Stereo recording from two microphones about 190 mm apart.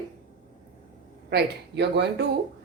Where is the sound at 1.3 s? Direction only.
65° right (ahead or behind).